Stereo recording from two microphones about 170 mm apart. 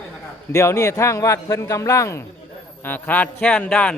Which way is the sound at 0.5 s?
15° left (ahead or behind).